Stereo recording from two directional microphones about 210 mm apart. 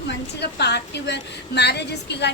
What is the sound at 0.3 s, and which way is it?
A woman's voice, 55° left (ahead or behind).